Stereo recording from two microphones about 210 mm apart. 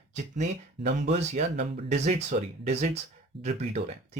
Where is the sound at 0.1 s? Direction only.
35° right (ahead or behind).